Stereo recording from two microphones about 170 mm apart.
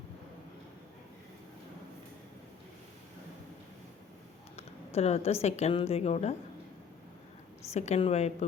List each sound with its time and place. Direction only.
4.5 s a woman's voice: 40° left (ahead or behind)
7.7 s a woman's voice: 40° left (ahead or behind)